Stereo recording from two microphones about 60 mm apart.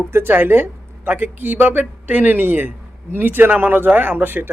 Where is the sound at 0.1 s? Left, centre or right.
Right.